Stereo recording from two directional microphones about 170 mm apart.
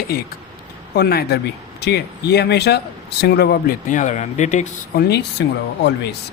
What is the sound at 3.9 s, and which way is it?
Speech, 45° left (ahead or behind).